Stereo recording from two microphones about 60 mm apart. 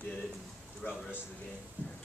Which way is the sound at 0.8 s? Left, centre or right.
Left.